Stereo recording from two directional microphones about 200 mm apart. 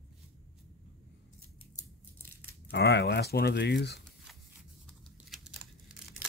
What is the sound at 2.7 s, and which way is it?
Speech, 55° left (ahead or behind).